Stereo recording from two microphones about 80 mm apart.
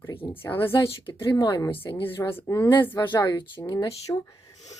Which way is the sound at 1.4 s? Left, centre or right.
Left.